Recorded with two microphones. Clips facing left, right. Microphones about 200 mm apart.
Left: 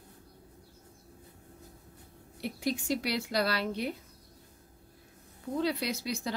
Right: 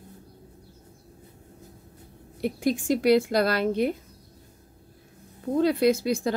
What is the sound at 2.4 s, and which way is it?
A woman's voice, 50° right (ahead or behind).